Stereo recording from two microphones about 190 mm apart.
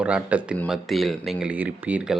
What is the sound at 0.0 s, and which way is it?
Speech, 5° right (ahead or behind).